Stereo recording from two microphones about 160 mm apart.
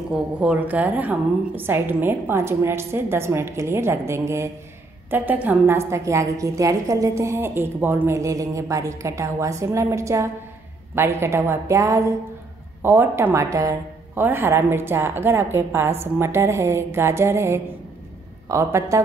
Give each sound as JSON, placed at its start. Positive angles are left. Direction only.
{"t": 0.1, "sound": "a woman's voice", "side_deg": -5}